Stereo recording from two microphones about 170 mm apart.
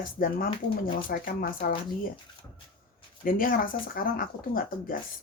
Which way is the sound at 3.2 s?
55° left (ahead or behind).